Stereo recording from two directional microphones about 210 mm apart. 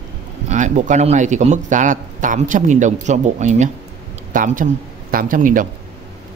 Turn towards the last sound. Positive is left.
turn(degrees=-40)  # may be behind; listen again after turning